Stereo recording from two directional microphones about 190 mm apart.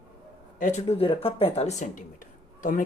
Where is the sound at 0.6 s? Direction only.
35° left (ahead or behind).